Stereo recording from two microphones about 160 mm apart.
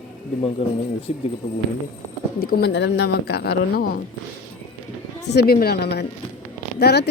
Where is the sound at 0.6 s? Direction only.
40° left (ahead or behind).